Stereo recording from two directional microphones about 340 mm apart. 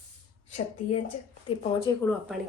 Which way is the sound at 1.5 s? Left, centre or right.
Centre.